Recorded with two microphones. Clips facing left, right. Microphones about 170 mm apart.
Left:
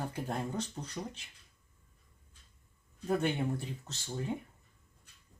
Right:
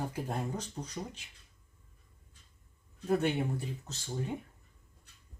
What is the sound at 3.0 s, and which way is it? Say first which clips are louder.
Speech: right 2 dB; 5° right (ahead or behind).